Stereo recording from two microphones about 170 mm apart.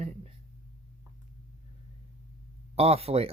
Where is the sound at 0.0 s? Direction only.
40° right (ahead or behind).